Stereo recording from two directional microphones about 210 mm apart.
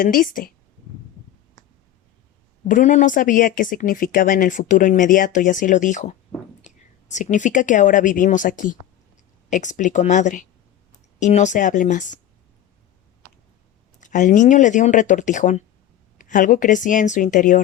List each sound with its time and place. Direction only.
0.0 s a woman's voice: 40° left (ahead or behind)
2.6 s a woman's voice: 35° left (ahead or behind)
14.0 s a woman's voice: 35° left (ahead or behind)